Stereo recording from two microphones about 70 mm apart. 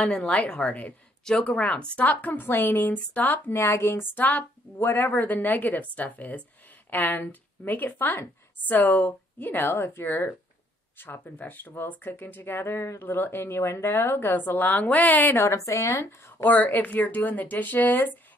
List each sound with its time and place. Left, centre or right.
0.0 s a woman's voice: centre
15.3 s a woman's voice: left